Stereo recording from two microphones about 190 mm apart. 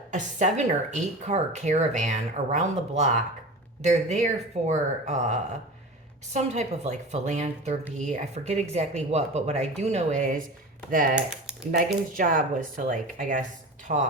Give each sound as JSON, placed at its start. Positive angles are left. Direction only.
{"t": 0.1, "sound": "speech", "side_deg": -40}
{"t": 11.1, "sound": "speech", "side_deg": -5}
{"t": 11.7, "sound": "speech", "side_deg": -45}